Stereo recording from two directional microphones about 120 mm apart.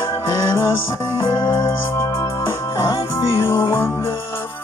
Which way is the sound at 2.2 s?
25° left (ahead or behind).